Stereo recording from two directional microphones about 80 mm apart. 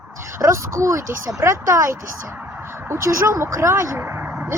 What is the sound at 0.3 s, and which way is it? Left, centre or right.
Speech, right.